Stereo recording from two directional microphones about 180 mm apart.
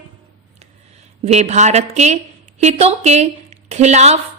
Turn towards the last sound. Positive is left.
turn(degrees=-40)  # may be behind; listen again after turning